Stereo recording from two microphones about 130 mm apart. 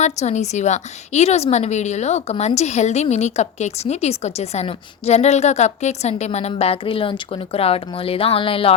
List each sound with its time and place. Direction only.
0.0 s a woman's voice: 60° left (ahead or behind)
6.5 s speech: 45° left (ahead or behind)